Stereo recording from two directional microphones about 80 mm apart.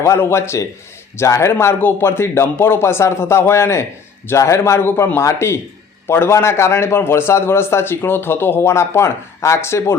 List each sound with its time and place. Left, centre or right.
0.0 s a man's voice: left